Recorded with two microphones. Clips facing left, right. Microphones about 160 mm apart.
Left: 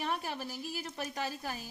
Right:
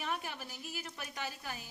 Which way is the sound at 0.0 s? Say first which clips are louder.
Left 4 dB; 35° left (ahead or behind).